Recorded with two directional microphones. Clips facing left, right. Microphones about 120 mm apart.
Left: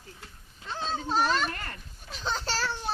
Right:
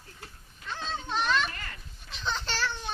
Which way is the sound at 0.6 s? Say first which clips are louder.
Left 3 dB; 30° left (ahead or behind).